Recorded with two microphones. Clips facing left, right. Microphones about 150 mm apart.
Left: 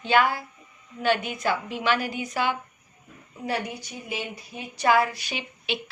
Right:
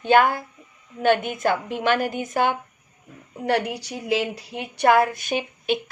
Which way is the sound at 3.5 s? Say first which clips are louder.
Right 7 dB; 75° right (ahead or behind).